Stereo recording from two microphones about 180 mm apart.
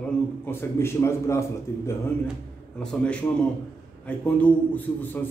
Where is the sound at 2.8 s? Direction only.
5° left (ahead or behind).